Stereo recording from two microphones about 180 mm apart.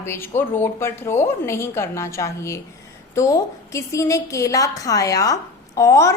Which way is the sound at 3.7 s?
15° left (ahead or behind).